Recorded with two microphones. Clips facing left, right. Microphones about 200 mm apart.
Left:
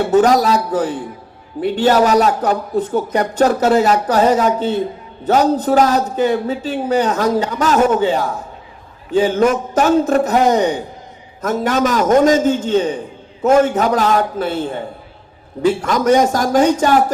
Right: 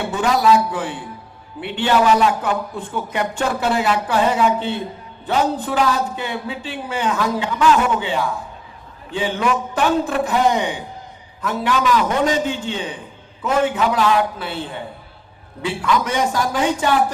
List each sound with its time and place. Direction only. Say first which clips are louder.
0.0 s a man's voice: left 6 dB; 40° left (ahead or behind)